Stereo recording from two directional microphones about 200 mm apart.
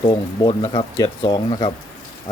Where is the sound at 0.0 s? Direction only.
20° left (ahead or behind).